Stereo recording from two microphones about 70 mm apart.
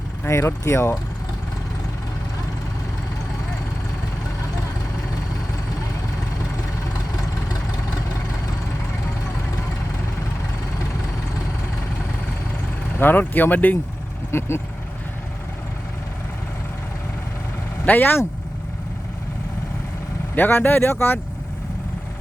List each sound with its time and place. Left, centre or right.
0.3 s speech: left
13.0 s speech: left
14.3 s speech: left
17.8 s speech: left
20.3 s speech: left